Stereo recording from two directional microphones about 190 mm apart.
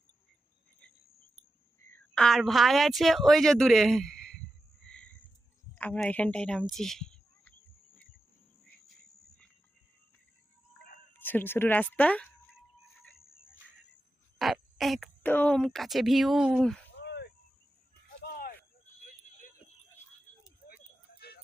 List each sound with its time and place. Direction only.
1.9 s speech: 5° left (ahead or behind)
4.8 s cricket: 5° left (ahead or behind)
5.7 s speech: 10° left (ahead or behind)
11.1 s speech: 10° left (ahead or behind)
14.3 s speech: centre (ahead or behind)
16.9 s a sound: 60° left (ahead or behind)
19.0 s vehicle: 50° left (ahead or behind)